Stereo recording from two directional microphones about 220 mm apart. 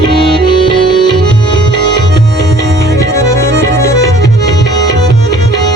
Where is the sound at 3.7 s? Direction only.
15° left (ahead or behind).